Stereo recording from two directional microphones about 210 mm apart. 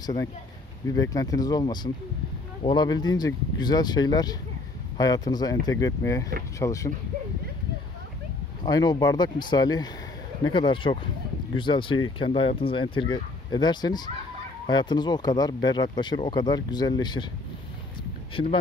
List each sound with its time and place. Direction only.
0.0 s speech: 20° left (ahead or behind)
8.6 s speech: 20° left (ahead or behind)
18.3 s speech: 25° left (ahead or behind)